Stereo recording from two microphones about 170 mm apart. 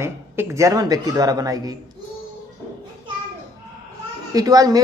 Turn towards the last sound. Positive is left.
turn(degrees=-20)  # may be behind; listen again after turning